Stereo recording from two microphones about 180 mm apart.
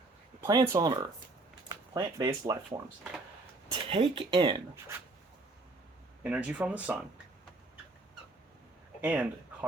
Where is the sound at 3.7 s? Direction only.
30° right (ahead or behind).